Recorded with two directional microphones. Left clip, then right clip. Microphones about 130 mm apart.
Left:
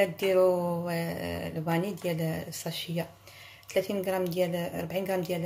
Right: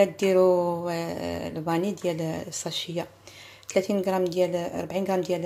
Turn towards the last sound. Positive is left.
turn(degrees=-30)  # may be behind; listen again after turning